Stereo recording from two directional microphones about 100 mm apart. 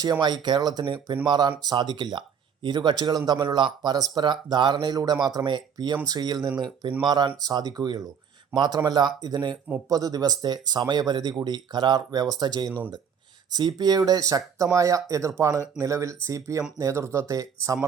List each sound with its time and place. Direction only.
0.0 s speech: 45° right (ahead or behind)